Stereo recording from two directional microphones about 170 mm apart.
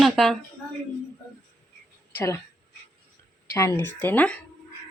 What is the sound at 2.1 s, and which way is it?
Speech, 15° left (ahead or behind).